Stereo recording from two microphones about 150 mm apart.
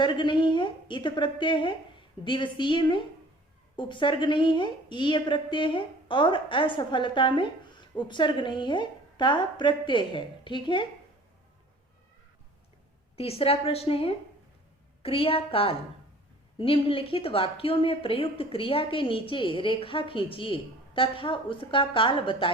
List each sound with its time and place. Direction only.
0.0 s a woman's voice: 30° left (ahead or behind)
13.1 s a woman's voice: 40° left (ahead or behind)